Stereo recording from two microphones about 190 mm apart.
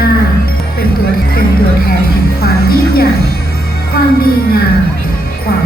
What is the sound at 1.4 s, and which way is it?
Music, 50° left (ahead or behind).